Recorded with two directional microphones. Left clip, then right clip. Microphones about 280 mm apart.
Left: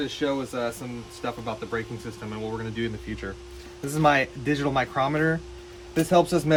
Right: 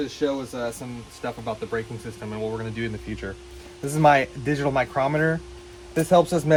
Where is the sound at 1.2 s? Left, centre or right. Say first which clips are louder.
Right 2 dB; centre.